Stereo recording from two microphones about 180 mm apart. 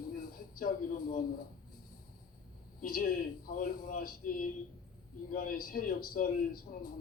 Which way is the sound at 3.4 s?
50° left (ahead or behind).